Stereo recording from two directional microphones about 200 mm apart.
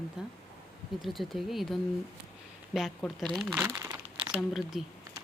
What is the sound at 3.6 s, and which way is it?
Crumpling, 15° right (ahead or behind).